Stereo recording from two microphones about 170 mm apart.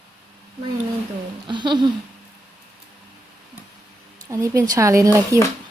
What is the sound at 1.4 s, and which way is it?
Speech, 25° right (ahead or behind).